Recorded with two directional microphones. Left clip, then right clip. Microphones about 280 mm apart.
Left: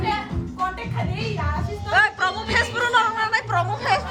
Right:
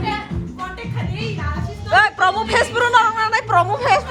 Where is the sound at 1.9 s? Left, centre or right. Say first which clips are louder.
Right 5 dB; centre.